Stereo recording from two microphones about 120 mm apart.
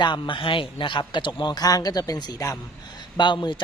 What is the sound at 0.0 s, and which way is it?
A man's voice, 45° left (ahead or behind).